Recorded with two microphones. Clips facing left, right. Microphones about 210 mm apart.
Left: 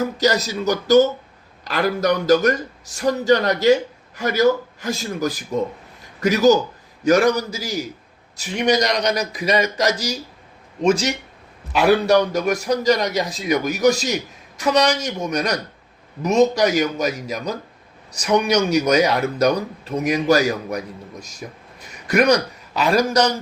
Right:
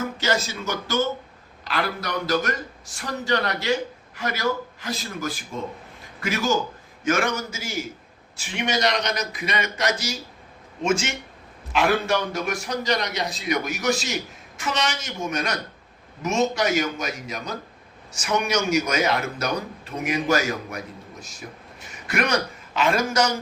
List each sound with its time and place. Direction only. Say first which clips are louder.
0.0 s a man's voice: left 6 dB; 40° left (ahead or behind)